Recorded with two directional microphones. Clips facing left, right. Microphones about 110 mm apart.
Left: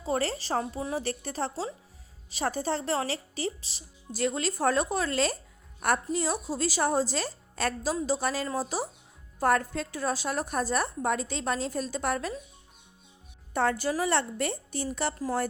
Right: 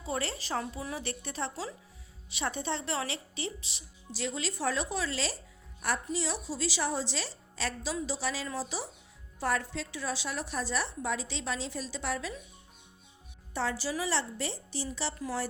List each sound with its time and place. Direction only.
0.0 s speech: 40° left (ahead or behind)
13.5 s a woman's voice: 55° left (ahead or behind)